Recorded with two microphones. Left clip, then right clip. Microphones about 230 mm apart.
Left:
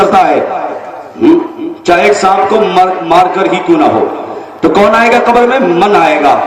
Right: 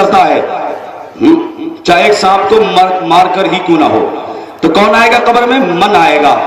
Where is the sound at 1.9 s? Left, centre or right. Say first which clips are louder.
Even; right.